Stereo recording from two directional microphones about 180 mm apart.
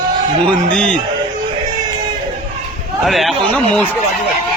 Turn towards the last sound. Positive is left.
turn(degrees=5)  # may be behind; listen again after turning